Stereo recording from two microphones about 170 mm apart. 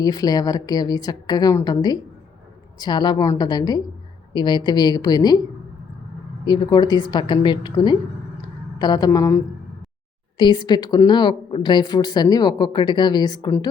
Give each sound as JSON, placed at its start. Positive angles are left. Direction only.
{"t": 0.0, "sound": "speech", "side_deg": 20}
{"t": 8.4, "sound": "a sound", "side_deg": 25}
{"t": 10.3, "sound": "speech", "side_deg": 25}